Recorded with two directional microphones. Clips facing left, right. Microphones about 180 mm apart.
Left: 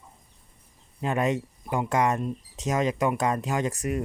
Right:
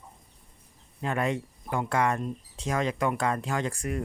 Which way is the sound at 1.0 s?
20° left (ahead or behind).